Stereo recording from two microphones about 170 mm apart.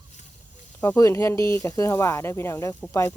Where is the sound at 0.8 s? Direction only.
15° left (ahead or behind).